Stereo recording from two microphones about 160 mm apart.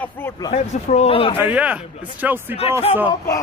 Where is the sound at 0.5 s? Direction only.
45° left (ahead or behind).